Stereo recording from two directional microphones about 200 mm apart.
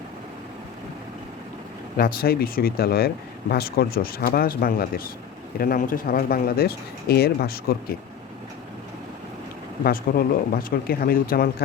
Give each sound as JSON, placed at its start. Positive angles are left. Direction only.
{"t": 2.0, "sound": "speech", "side_deg": 50}
{"t": 9.8, "sound": "speech", "side_deg": 45}